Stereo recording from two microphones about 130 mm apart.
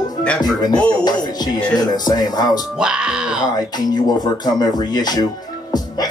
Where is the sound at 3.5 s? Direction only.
30° left (ahead or behind).